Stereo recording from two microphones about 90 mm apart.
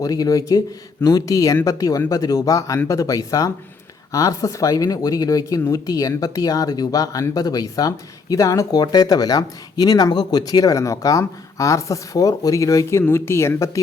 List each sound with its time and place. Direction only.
0.0 s speech: 40° left (ahead or behind)